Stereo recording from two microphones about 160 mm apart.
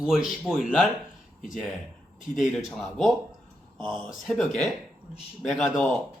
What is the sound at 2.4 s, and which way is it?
Speech, centre (ahead or behind).